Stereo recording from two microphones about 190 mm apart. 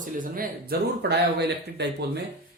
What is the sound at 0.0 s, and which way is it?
Speech, 45° right (ahead or behind).